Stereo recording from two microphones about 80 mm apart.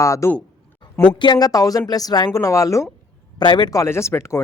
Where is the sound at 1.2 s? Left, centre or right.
Left.